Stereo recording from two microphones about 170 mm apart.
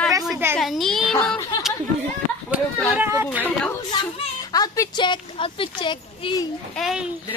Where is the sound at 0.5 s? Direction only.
Centre (ahead or behind).